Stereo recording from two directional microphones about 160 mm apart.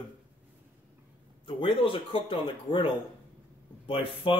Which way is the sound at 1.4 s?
30° left (ahead or behind).